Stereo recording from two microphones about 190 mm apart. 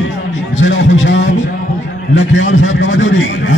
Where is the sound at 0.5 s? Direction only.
85° left.